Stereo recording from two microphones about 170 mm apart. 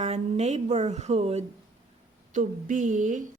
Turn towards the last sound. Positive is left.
turn(degrees=-50)  # may be behind; listen again after turning